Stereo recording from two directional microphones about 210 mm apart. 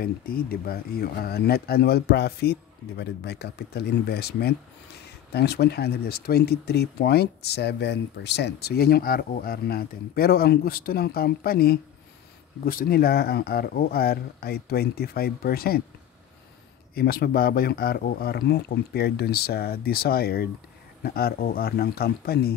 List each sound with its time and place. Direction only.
0.0 s speech: 45° left (ahead or behind)
16.9 s speech: 45° left (ahead or behind)